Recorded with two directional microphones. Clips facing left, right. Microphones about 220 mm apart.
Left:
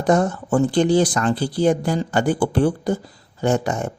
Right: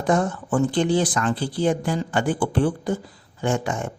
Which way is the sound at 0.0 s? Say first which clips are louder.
Left 3 dB; 40° left (ahead or behind).